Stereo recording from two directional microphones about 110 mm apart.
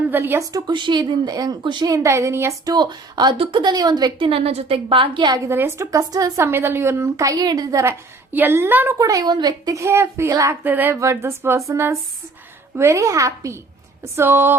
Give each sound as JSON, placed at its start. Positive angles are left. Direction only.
{"t": 0.1, "sound": "a woman's voice", "side_deg": -20}
{"t": 0.7, "sound": "speech", "side_deg": -45}
{"t": 2.6, "sound": "speech", "side_deg": -40}
{"t": 3.3, "sound": "a woman's voice", "side_deg": -60}
{"t": 3.6, "sound": "speech", "side_deg": -40}
{"t": 4.3, "sound": "a woman's voice", "side_deg": -60}
{"t": 5.5, "sound": "a woman's voice", "side_deg": -20}
{"t": 8.3, "sound": "a woman's voice", "side_deg": -20}
{"t": 9.0, "sound": "a woman's voice", "side_deg": -30}